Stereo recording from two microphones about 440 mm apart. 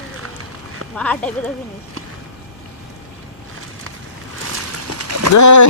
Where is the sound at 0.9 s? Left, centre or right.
Centre.